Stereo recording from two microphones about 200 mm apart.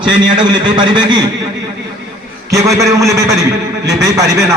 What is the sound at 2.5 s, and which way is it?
A man's voice, 15° right (ahead or behind).